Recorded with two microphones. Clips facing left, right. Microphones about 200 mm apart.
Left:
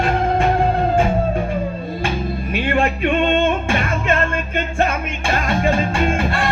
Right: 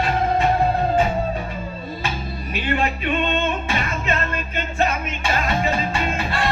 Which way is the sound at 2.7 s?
50° left (ahead or behind).